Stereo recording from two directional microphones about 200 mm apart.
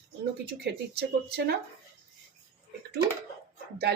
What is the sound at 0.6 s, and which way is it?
Speech, 55° right (ahead or behind).